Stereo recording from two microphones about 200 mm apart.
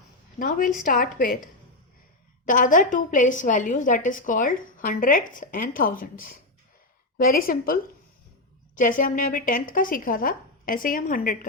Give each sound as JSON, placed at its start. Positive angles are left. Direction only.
{"t": 0.3, "sound": "speech", "side_deg": 45}
{"t": 2.5, "sound": "a woman's voice", "side_deg": 40}